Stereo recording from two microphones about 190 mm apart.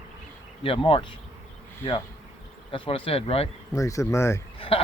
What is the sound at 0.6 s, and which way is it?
Speech, 30° left (ahead or behind).